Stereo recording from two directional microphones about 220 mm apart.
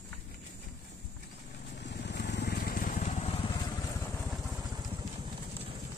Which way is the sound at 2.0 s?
50° left (ahead or behind).